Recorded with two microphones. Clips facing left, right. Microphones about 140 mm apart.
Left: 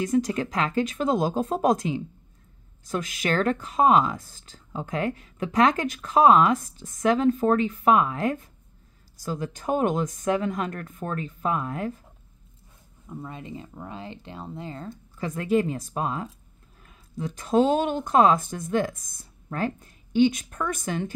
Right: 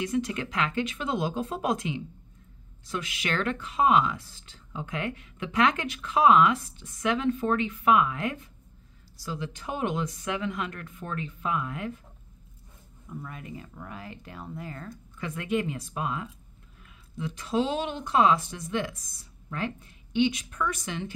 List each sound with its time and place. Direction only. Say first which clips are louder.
0.0 s speech: left 5 dB; 40° left (ahead or behind)
13.0 s speech: left 3 dB; 25° left (ahead or behind); by 21.1 s 50° left (ahead or behind)